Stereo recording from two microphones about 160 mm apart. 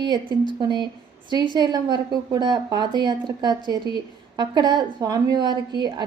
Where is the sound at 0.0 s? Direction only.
30° right (ahead or behind).